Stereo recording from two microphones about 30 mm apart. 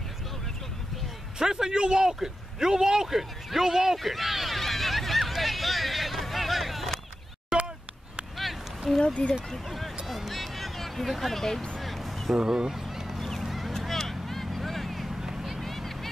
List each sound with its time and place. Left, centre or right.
1.4 s speech: right
4.0 s speech: centre
4.6 s hubbub: centre
7.5 s a sound: centre
9.0 s speech: left
9.5 s speech: centre
10.0 s a sound: centre
11.8 s music: centre
12.4 s a sound: centre
13.2 s fowl: centre
13.7 s vehicle: centre
15.0 s vehicle: centre
15.6 s vehicle: centre